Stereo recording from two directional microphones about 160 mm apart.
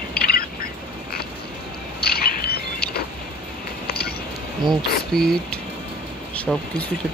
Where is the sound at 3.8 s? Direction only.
80° left.